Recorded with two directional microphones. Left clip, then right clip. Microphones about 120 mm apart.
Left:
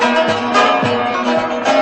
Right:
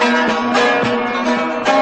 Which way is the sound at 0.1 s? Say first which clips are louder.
Left 1 dB; 40° right (ahead or behind).